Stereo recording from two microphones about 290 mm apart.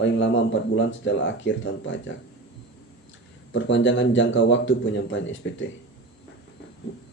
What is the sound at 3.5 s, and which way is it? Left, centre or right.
Speech, left.